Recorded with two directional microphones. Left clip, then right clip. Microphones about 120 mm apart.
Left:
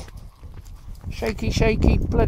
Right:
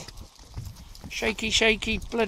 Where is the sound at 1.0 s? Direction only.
30° left (ahead or behind).